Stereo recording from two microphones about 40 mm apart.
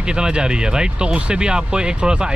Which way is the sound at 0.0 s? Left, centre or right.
Centre.